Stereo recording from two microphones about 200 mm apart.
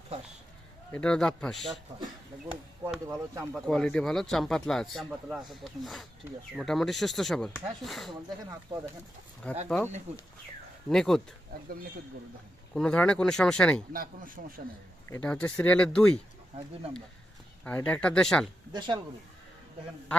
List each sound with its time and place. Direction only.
0.9 s speech: 5° left (ahead or behind)
2.5 s speech: 10° right (ahead or behind)
3.5 s speech: 5° left (ahead or behind)
9.6 s speech: 5° left (ahead or behind)
12.7 s speech: 5° left (ahead or behind)
13.9 s speech: 45° right (ahead or behind)
15.1 s speech: 5° left (ahead or behind)
17.6 s speech: 5° left (ahead or behind)
18.7 s speech: 20° right (ahead or behind)